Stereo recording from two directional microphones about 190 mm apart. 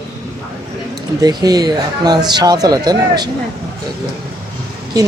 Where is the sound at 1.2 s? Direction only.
20° right (ahead or behind).